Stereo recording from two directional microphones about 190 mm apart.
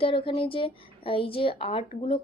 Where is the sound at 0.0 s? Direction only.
30° left (ahead or behind).